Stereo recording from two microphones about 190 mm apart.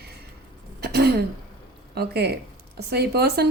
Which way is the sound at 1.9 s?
55° right (ahead or behind).